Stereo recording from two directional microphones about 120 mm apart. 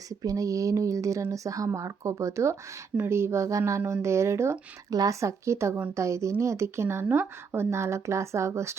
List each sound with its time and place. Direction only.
0.1 s speech: 30° right (ahead or behind)